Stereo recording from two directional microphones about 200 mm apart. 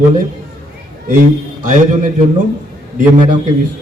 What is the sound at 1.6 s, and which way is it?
Speech, 40° right (ahead or behind).